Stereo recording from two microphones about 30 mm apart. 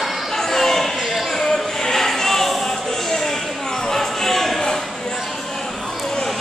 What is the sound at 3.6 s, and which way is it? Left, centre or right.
Music, centre.